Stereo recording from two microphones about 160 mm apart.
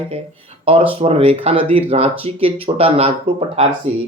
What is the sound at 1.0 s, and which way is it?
Speech, 40° right (ahead or behind).